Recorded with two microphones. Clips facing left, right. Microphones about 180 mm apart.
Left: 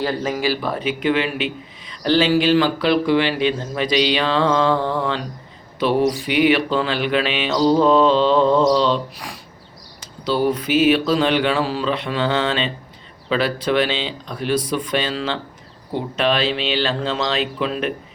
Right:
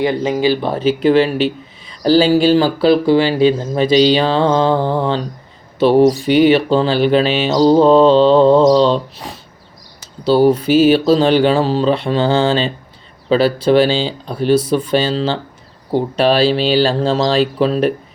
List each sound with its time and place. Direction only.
0.0 s speech: 20° right (ahead or behind); by 17.9 s 35° right (ahead or behind)